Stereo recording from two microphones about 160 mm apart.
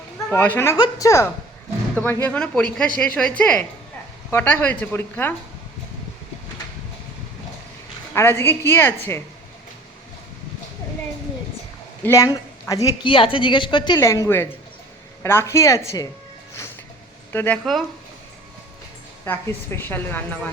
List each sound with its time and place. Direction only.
0.3 s a woman's voice: 10° left (ahead or behind)
8.1 s a woman's voice: 15° left (ahead or behind)
12.0 s a woman's voice: 20° left (ahead or behind)
14.0 s a woman's voice: 20° left (ahead or behind)
17.3 s a woman's voice: 10° left (ahead or behind)
19.2 s a woman's voice: 15° left (ahead or behind)